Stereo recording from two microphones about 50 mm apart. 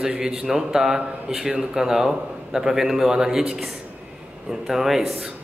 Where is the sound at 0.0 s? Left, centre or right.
Centre.